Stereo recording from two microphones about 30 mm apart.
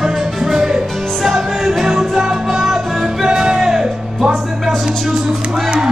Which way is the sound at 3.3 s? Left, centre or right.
Right.